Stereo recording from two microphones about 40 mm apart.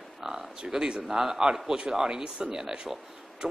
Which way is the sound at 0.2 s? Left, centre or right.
Centre.